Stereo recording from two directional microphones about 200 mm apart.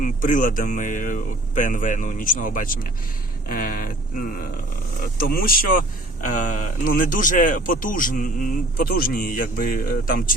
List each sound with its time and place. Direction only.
0.0 s speech: 40° left (ahead or behind)